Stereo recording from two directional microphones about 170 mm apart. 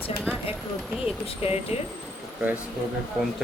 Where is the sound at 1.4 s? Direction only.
35° left (ahead or behind).